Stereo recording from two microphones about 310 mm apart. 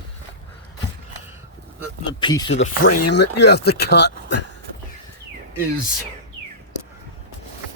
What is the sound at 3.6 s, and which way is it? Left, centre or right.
Speech, left.